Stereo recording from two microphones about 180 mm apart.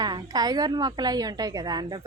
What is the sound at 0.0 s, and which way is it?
A woman's voice, 20° right (ahead or behind).